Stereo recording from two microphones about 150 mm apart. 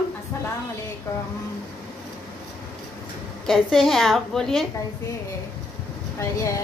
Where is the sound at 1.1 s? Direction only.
20° left (ahead or behind).